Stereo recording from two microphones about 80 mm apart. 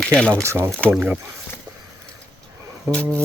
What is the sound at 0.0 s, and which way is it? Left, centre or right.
Speech, centre.